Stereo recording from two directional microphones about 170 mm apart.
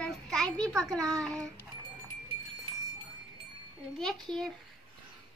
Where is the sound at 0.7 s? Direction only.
20° right (ahead or behind).